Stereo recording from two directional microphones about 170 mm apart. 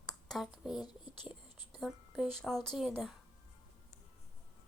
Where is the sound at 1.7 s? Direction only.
Centre (ahead or behind).